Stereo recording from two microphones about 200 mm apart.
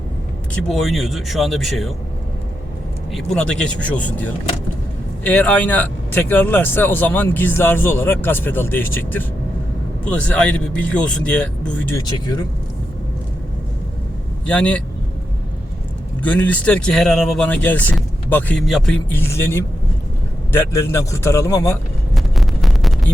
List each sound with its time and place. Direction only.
0.7 s speech: centre (ahead or behind)
3.3 s speech: 5° left (ahead or behind)
12.0 s speech: 20° left (ahead or behind)
14.4 s speech: 5° left (ahead or behind)
16.2 s speech: 10° left (ahead or behind)
19.1 s speech: 10° left (ahead or behind)
22.1 s a sound: centre (ahead or behind)